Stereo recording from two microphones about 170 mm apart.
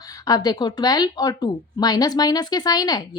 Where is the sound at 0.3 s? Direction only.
20° left (ahead or behind).